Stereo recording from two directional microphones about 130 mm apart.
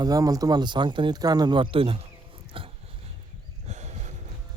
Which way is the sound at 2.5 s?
40° right (ahead or behind).